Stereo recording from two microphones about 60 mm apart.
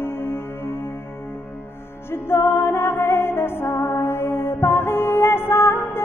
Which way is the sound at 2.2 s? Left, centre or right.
Left.